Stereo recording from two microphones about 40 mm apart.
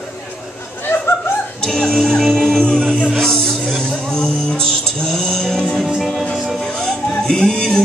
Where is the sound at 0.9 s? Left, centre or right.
Left.